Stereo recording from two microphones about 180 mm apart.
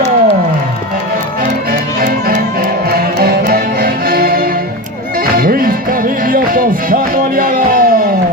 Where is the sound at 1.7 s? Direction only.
55° right (ahead or behind).